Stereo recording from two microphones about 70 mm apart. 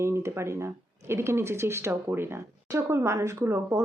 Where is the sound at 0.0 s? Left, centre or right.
Right.